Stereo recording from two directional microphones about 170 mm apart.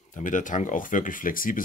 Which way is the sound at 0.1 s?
50° left (ahead or behind).